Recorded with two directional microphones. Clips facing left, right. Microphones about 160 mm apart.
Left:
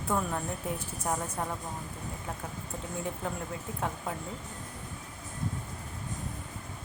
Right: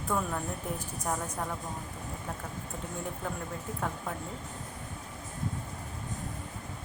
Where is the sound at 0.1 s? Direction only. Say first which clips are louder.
Left 1 dB; 5° left (ahead or behind).